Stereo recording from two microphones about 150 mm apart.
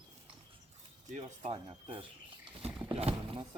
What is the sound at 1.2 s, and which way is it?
Speech, 35° right (ahead or behind).